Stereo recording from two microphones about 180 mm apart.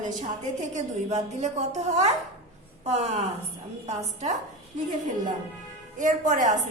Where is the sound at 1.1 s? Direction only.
40° right (ahead or behind).